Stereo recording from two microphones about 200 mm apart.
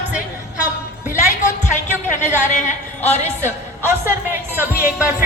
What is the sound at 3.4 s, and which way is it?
A woman's voice, 10° right (ahead or behind).